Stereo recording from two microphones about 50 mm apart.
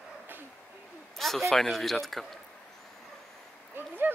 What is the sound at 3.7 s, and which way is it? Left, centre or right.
Speech, right.